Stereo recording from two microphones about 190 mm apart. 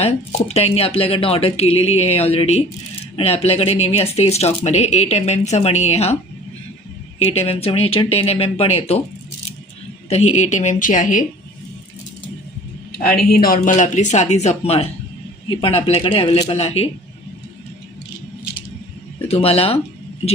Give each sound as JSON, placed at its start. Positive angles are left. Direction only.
{"t": 0.0, "sound": "speech", "side_deg": 35}
{"t": 7.2, "sound": "speech", "side_deg": 30}
{"t": 10.1, "sound": "speech", "side_deg": 35}
{"t": 13.0, "sound": "speech", "side_deg": 50}
{"t": 19.3, "sound": "speech", "side_deg": 30}